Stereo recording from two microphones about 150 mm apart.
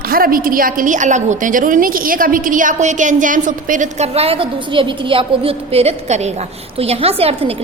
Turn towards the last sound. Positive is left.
turn(degrees=-40)  # may be behind; listen again after turning